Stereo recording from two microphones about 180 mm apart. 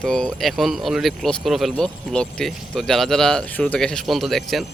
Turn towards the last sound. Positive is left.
turn(degrees=0)  # may be behind; listen again after turning